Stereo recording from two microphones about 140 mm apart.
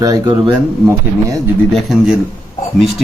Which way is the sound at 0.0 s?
25° right (ahead or behind).